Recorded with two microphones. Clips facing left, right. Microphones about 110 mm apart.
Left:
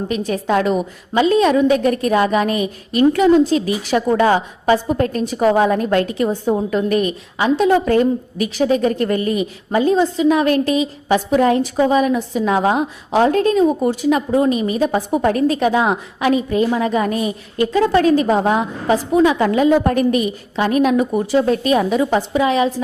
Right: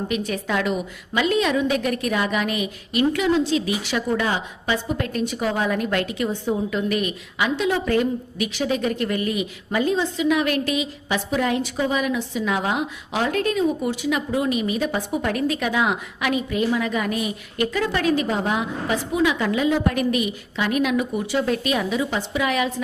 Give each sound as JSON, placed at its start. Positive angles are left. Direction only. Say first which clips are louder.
{"t": 0.1, "sound": "a woman's voice", "louder": "left 9 dB", "side_deg": 35}
{"t": 22.4, "sound": "a woman's voice", "louder": "left 5 dB", "side_deg": 30}